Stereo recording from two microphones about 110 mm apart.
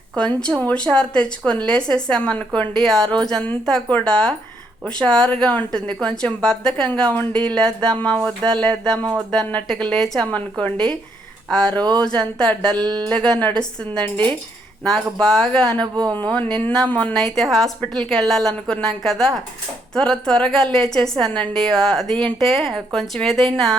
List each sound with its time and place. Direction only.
0.2 s a woman's voice: 10° left (ahead or behind)
11.9 s a woman's voice: 10° left (ahead or behind)
17.2 s a woman's voice: 5° left (ahead or behind)